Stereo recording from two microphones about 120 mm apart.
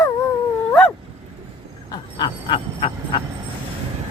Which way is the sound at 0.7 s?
15° left (ahead or behind).